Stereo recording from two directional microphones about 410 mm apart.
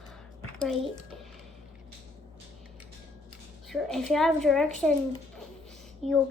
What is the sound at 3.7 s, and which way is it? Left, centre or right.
Speech, centre.